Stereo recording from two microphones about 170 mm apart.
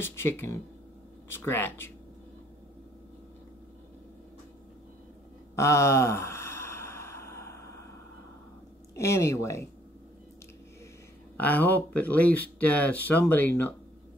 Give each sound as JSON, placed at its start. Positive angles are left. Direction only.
{"t": 0.0, "sound": "speech", "side_deg": 15}
{"t": 5.6, "sound": "a sound", "side_deg": 15}
{"t": 8.9, "sound": "speech", "side_deg": 15}
{"t": 11.3, "sound": "speech", "side_deg": 10}